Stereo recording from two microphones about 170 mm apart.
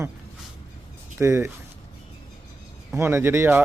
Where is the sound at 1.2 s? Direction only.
15° right (ahead or behind).